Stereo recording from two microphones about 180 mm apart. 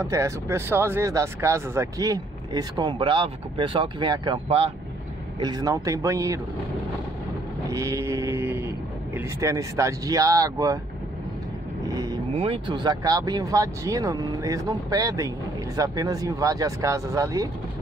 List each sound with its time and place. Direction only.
0.0 s speech: 15° right (ahead or behind); by 4.7 s 35° right (ahead or behind)
5.4 s speech: 20° right (ahead or behind)
7.7 s speech: 15° right (ahead or behind)
11.8 s vehicle: 20° right (ahead or behind)
12.4 s speech: 30° right (ahead or behind)